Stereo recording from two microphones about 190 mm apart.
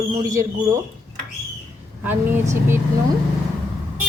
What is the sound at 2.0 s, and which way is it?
Speech, 10° right (ahead or behind).